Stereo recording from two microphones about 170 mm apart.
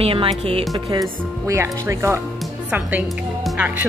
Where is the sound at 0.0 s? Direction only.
35° right (ahead or behind).